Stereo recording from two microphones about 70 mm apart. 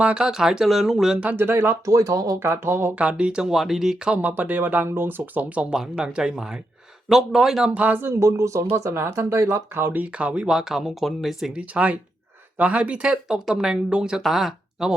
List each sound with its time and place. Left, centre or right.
0.0 s speech: centre
1.2 s speech: right
1.9 s speech: right
2.4 s speech: right
3.0 s speech: centre
4.1 s speech: right; by 7.7 s centre
7.7 s speech: right
8.1 s speech: right
10.0 s speech: centre
11.5 s speech: centre